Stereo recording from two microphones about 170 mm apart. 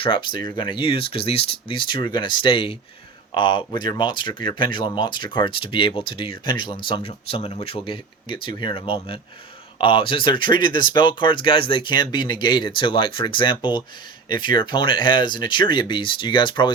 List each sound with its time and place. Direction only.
0.0 s speech: 30° left (ahead or behind)